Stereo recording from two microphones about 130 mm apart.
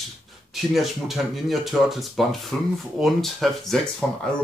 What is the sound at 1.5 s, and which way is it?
Speech, centre (ahead or behind).